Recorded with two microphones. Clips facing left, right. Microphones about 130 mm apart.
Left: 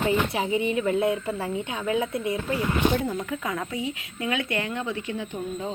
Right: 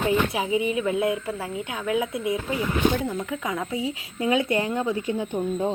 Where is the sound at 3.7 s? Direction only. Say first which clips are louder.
Right 2 dB; 30° right (ahead or behind).